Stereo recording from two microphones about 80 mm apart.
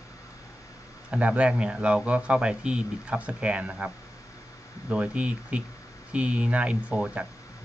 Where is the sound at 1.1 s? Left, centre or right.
Centre.